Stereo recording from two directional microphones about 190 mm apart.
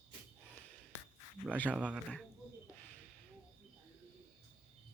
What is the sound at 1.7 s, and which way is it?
Mantra, 5° right (ahead or behind).